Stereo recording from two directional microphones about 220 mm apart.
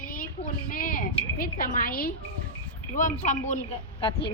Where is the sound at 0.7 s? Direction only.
40° left (ahead or behind).